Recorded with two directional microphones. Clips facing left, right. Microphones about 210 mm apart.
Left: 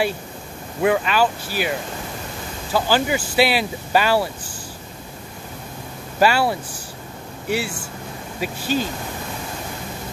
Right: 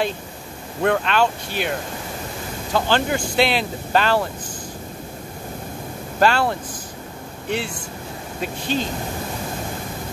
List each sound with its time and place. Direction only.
0.8 s speech: 5° left (ahead or behind)
6.1 s speech: 5° left (ahead or behind)